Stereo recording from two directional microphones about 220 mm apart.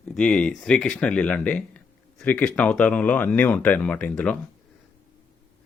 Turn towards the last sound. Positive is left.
turn(degrees=5)  # may be behind; listen again after turning